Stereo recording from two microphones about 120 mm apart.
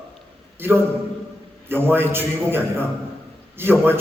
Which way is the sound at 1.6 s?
20° right (ahead or behind).